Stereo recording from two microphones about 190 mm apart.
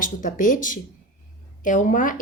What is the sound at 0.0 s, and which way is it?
A woman's voice, 45° left (ahead or behind).